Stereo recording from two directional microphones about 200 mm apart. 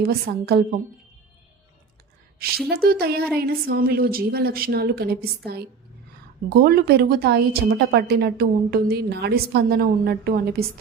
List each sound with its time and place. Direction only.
0.0 s a woman's voice: 50° right (ahead or behind)
2.6 s a woman's voice: 50° right (ahead or behind)
6.5 s a woman's voice: 50° right (ahead or behind)